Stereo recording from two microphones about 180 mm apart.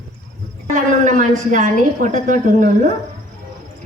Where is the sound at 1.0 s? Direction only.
45° right (ahead or behind).